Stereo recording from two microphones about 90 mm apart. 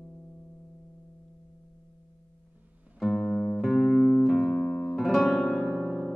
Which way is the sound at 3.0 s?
Centre (ahead or behind).